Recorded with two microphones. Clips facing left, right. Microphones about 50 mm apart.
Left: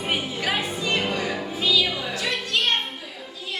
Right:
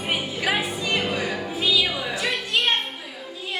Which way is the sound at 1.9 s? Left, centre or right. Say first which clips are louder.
Right 1 dB; centre.